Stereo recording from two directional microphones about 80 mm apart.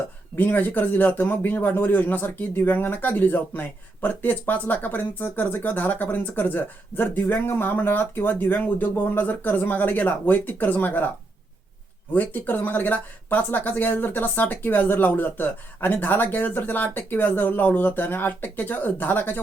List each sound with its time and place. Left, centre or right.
0.3 s a man's voice: left
12.1 s a man's voice: left